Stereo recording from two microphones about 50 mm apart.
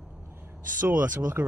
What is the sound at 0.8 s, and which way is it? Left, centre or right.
Speech, right.